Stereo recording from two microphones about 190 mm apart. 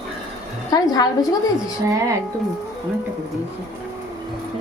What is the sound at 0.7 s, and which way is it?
Speech, 20° left (ahead or behind).